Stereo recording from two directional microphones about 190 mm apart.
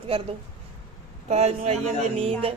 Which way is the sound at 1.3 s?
35° right (ahead or behind).